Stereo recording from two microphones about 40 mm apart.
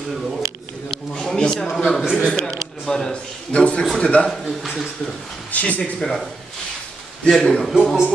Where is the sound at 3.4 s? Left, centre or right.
Left.